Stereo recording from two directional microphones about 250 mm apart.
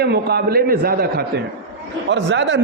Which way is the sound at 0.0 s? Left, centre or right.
Right.